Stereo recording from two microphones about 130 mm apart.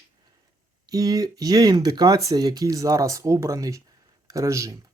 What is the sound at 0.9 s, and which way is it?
Speech, 30° right (ahead or behind).